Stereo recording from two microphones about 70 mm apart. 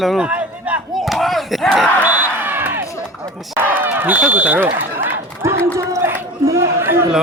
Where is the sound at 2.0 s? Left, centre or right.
Right.